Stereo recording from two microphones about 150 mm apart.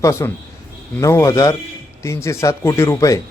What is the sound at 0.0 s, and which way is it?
A man's voice, 20° left (ahead or behind).